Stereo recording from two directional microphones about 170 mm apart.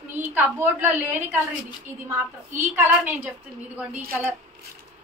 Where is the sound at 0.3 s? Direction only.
10° right (ahead or behind).